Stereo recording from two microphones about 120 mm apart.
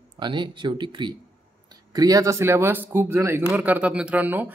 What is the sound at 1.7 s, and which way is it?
Speech, 30° right (ahead or behind).